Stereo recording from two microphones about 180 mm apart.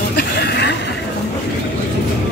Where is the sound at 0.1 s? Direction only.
65° left (ahead or behind).